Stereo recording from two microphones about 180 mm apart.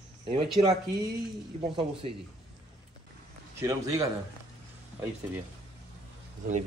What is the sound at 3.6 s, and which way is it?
Speech, 15° right (ahead or behind).